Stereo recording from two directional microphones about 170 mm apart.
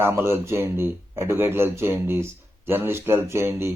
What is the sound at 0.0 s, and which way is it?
Speech, 15° right (ahead or behind).